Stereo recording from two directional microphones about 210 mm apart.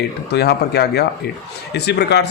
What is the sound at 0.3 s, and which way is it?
A man's voice, 50° left (ahead or behind).